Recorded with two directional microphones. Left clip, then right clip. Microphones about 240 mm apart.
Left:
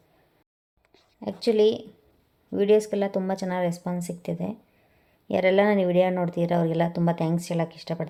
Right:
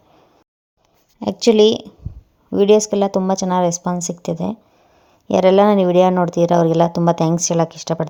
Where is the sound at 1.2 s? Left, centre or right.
Right.